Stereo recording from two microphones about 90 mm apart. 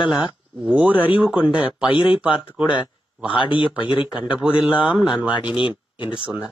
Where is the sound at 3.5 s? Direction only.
70° left (ahead or behind).